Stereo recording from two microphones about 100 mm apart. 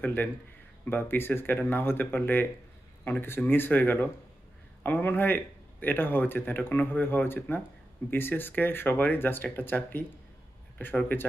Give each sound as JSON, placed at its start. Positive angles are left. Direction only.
{"t": 0.0, "sound": "a man's voice", "side_deg": 20}